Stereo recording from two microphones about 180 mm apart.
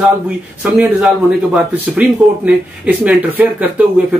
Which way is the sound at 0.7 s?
5° right (ahead or behind).